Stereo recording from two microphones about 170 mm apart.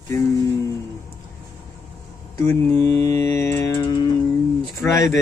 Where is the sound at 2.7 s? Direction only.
15° left (ahead or behind).